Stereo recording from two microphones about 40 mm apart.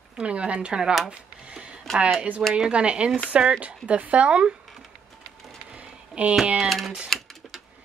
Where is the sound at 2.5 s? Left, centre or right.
Right.